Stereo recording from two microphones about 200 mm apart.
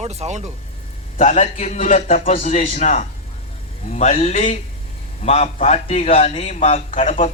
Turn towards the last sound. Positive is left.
turn(degrees=30)  # may be behind; listen again after turning